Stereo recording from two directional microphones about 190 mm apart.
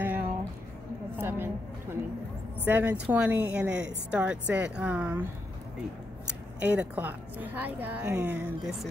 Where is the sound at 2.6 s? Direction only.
10° right (ahead or behind).